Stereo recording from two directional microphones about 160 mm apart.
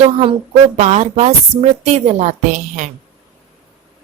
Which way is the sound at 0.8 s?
45° right (ahead or behind).